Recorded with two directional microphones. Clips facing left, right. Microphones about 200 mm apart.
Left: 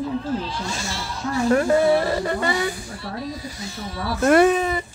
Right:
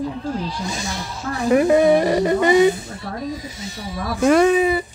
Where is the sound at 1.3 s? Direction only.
15° right (ahead or behind).